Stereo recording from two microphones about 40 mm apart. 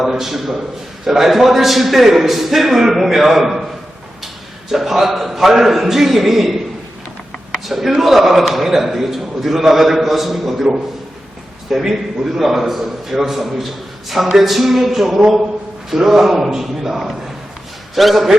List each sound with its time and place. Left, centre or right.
0.0 s a man's voice: centre
4.7 s a man's voice: centre
7.7 s a man's voice: centre
11.7 s a man's voice: centre